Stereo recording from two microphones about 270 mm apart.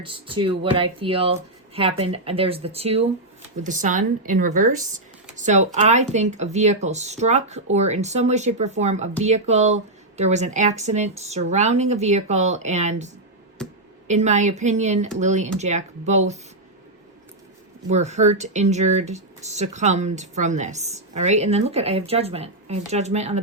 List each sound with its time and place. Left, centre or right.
0.0 s speech: centre
14.1 s speech: right
17.8 s speech: right